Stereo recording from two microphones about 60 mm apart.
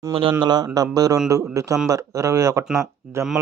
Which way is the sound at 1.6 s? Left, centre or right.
Right.